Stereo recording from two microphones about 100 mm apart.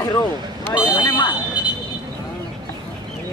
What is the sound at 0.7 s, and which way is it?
Speech, 45° left (ahead or behind).